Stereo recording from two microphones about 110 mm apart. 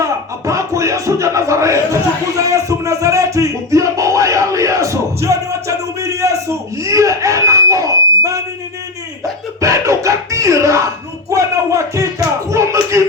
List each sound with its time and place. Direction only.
0.0 s music: 30° right (ahead or behind)
9.6 s music: 30° right (ahead or behind)
11.3 s a sound: 30° right (ahead or behind)